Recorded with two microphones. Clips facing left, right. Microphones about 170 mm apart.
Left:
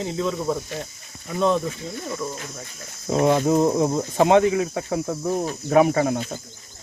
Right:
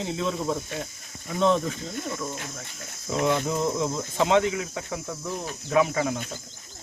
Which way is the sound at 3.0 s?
40° left (ahead or behind).